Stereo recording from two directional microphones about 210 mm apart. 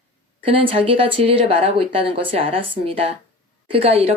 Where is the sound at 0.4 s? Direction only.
25° right (ahead or behind).